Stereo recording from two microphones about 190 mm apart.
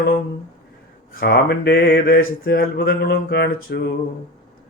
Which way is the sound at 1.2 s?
55° left (ahead or behind).